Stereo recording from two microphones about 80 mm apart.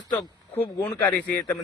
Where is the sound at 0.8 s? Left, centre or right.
Centre.